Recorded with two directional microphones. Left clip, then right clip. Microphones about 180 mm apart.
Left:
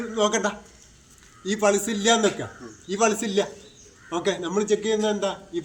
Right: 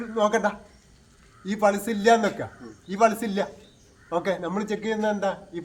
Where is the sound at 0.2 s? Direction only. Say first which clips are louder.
Right 1 dB; 25° right (ahead or behind).